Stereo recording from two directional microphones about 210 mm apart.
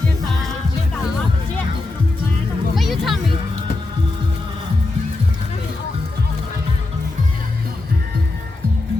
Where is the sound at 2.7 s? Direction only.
Centre (ahead or behind).